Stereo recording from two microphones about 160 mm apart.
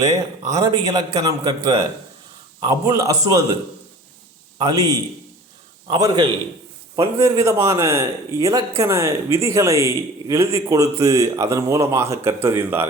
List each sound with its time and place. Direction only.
0.0 s speech: 20° right (ahead or behind)
4.5 s a man's voice: 25° right (ahead or behind)